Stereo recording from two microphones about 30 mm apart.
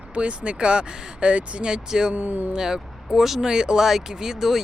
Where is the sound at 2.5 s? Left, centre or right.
Centre.